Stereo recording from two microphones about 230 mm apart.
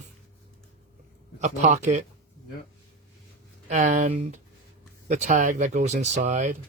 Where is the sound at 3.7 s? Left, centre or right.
Right.